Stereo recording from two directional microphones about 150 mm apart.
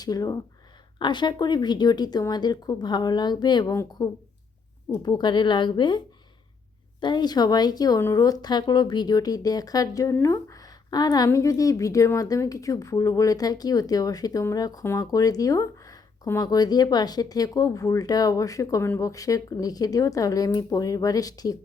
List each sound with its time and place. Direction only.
0.0 s a woman's voice: 25° left (ahead or behind)
7.0 s a woman's voice: 30° left (ahead or behind)